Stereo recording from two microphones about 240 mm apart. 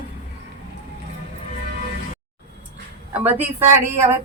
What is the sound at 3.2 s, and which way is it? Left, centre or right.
Speech, centre.